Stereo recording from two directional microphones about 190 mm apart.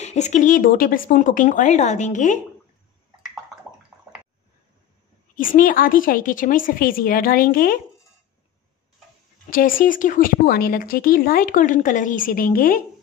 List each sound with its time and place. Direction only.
0.0 s speech: 35° left (ahead or behind)
5.3 s speech: 45° left (ahead or behind)
9.5 s speech: 45° left (ahead or behind)